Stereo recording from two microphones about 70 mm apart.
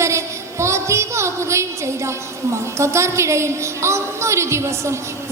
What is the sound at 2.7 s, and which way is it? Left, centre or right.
A woman's voice, right.